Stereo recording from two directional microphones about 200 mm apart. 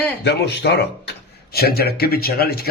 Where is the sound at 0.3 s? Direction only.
55° left (ahead or behind).